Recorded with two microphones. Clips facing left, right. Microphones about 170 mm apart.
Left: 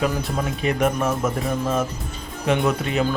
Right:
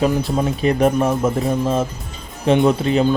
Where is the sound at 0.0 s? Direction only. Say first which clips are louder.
Right 6 dB; 30° right (ahead or behind).